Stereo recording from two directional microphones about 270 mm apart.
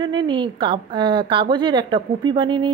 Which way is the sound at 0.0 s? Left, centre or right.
Centre.